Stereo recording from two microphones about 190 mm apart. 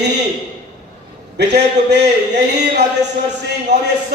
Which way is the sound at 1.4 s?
65° right (ahead or behind).